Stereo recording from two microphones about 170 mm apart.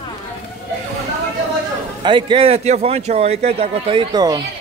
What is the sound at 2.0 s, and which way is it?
Speech, 30° right (ahead or behind).